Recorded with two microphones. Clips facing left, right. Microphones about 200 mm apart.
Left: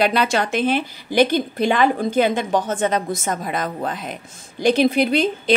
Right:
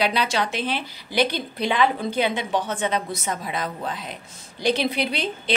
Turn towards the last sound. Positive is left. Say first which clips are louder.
# left 8 dB
turn(degrees=45)  # may be behind; listen again after turning